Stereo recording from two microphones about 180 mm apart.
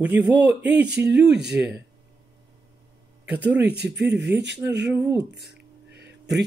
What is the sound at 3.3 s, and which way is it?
Speech, 5° right (ahead or behind).